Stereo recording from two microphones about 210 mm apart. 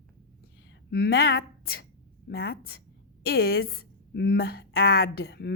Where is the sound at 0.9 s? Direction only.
50° left (ahead or behind).